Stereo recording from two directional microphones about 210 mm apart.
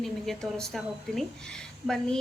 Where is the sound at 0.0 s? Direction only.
Centre (ahead or behind).